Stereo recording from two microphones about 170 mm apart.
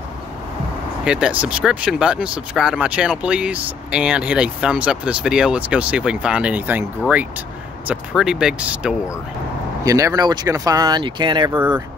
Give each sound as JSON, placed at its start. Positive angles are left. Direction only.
{"t": 1.0, "sound": "speech", "side_deg": -5}
{"t": 9.8, "sound": "speech", "side_deg": -20}